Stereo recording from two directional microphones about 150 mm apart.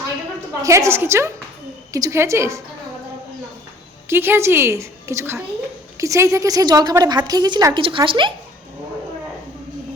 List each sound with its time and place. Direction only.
0.6 s a woman's voice: 20° right (ahead or behind)
4.1 s a woman's voice: 15° right (ahead or behind); by 8.3 s 35° right (ahead or behind)